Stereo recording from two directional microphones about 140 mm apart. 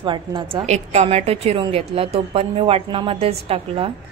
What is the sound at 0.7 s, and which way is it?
A woman's voice, 55° right (ahead or behind).